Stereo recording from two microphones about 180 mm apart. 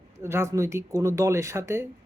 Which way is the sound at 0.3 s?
15° right (ahead or behind).